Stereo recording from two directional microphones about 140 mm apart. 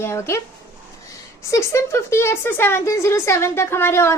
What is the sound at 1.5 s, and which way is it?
A woman's voice, 20° left (ahead or behind).